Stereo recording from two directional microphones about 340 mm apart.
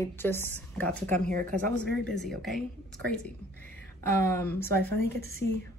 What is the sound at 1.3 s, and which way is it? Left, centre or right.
Speech, right.